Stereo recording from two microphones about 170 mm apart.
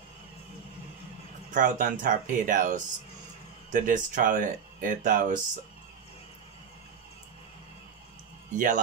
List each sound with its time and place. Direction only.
1.5 s speech: 50° right (ahead or behind)
8.5 s speech: 50° right (ahead or behind)